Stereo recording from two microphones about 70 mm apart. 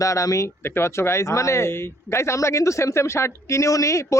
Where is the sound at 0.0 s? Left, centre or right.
Left.